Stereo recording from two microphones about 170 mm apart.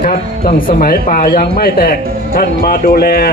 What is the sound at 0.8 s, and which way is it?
Speech, 55° left (ahead or behind).